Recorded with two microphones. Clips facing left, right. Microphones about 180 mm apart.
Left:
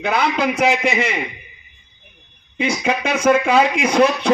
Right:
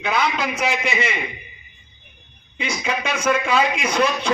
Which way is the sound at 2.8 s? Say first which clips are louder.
Left 5 dB; 55° left (ahead or behind).